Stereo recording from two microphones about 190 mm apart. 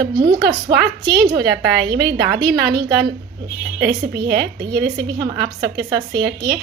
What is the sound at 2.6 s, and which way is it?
Speech, 20° right (ahead or behind).